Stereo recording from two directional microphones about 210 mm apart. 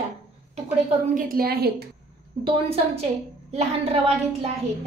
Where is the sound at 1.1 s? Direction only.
40° right (ahead or behind).